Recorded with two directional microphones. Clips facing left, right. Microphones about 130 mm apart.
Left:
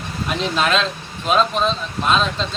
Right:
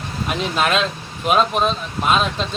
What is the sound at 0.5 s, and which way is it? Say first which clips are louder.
A man's voice: right 1 dB; 5° right (ahead or behind).